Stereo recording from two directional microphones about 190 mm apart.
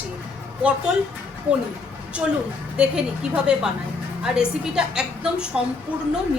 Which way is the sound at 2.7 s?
5° right (ahead or behind).